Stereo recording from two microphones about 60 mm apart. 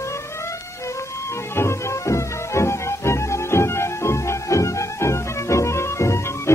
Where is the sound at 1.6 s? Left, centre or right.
Left.